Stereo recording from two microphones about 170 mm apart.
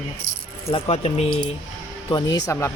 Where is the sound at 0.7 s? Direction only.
35° left (ahead or behind).